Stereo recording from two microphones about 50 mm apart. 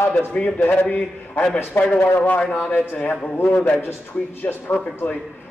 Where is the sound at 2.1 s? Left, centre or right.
Left.